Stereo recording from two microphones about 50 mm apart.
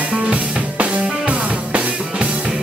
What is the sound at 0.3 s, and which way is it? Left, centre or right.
Drum kit, right.